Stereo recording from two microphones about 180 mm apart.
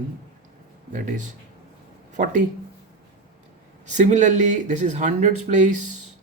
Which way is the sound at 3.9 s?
40° right (ahead or behind).